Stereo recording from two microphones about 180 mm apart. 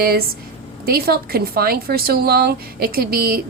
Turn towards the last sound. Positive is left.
turn(degrees=-55)  # may be behind; listen again after turning